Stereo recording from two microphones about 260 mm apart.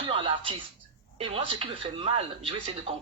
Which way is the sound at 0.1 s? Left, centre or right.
Centre.